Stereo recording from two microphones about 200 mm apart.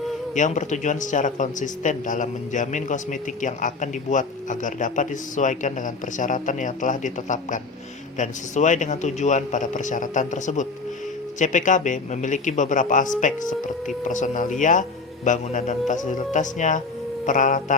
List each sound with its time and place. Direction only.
0.3 s a man's voice: 40° left (ahead or behind)